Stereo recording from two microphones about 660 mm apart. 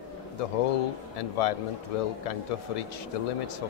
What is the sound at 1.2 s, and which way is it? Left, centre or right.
Speech, left.